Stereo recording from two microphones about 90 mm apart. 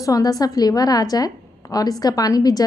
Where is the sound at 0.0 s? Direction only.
45° left (ahead or behind).